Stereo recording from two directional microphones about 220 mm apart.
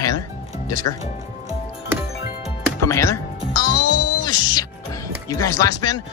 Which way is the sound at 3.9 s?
90° left.